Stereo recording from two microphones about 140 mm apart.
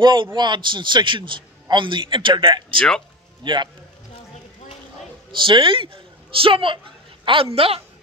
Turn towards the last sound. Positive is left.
turn(degrees=-40)  # may be behind; listen again after turning